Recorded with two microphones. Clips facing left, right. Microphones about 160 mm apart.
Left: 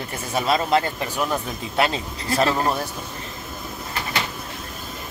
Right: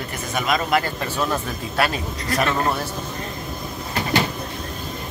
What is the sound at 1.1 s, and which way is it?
Speech, 15° left (ahead or behind).